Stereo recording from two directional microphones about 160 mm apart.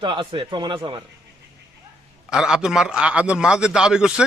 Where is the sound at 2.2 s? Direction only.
5° right (ahead or behind).